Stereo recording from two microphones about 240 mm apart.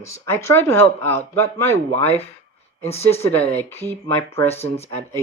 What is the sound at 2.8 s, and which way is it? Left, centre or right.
Speech, left.